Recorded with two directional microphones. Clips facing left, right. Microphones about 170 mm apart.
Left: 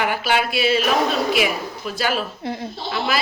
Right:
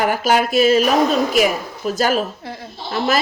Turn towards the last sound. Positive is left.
turn(degrees=-45)  # may be behind; listen again after turning